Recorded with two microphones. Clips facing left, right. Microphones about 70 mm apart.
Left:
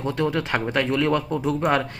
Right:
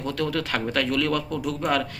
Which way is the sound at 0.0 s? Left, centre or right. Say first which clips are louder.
Left 3 dB; left.